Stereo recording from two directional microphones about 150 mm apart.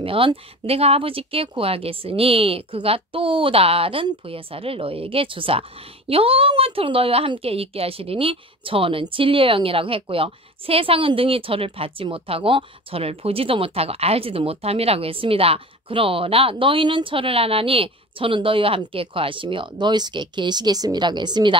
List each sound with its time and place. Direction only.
0.0 s speech: 35° right (ahead or behind)